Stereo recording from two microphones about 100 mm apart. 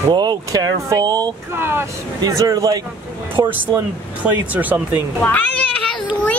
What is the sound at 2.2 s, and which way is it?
Speech, 40° right (ahead or behind).